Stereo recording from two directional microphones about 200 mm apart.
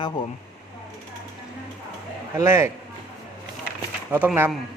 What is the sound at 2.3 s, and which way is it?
Speech, 15° right (ahead or behind).